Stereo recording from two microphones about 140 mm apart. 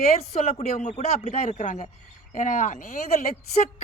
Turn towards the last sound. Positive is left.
turn(degrees=65)  # may be behind; listen again after turning